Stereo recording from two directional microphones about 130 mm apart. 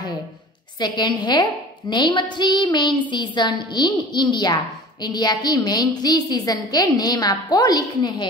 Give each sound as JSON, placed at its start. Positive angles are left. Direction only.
{"t": 0.7, "sound": "a woman's voice", "side_deg": 35}